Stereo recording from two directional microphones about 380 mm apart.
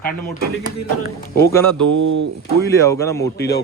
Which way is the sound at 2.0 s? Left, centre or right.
Right.